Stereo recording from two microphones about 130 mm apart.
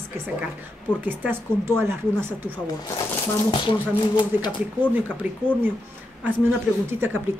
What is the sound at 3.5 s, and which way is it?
Speech, 40° left (ahead or behind).